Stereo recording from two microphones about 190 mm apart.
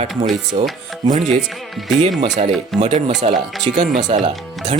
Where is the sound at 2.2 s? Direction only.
35° right (ahead or behind).